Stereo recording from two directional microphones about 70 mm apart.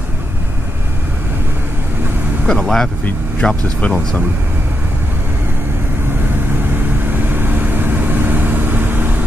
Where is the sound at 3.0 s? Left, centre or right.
Centre.